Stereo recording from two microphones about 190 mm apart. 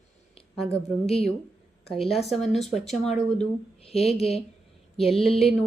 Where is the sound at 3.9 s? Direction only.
30° left (ahead or behind).